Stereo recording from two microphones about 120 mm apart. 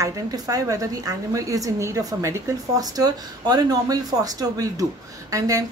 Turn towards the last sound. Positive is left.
turn(degrees=-30)  # may be behind; listen again after turning